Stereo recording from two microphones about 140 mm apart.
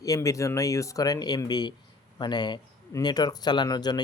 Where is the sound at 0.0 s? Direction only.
25° left (ahead or behind).